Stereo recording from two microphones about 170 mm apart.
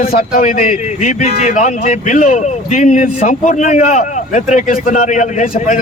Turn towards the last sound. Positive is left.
turn(degrees=45)  # may be behind; listen again after turning